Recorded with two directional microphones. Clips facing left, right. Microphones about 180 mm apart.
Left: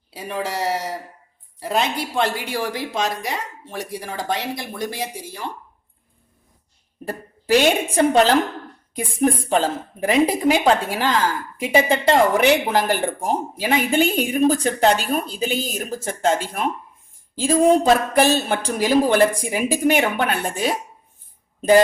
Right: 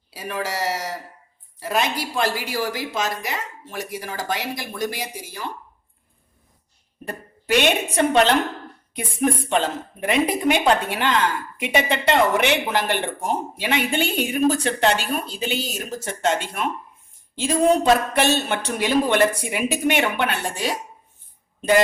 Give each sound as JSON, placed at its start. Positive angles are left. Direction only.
{"t": 0.1, "sound": "speech", "side_deg": 25}
{"t": 7.1, "sound": "speech", "side_deg": 35}
{"t": 16.2, "sound": "speech", "side_deg": 35}
{"t": 18.1, "sound": "speech", "side_deg": 35}